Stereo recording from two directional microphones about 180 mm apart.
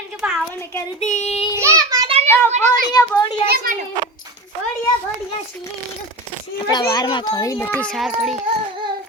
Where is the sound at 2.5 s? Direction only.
45° right (ahead or behind).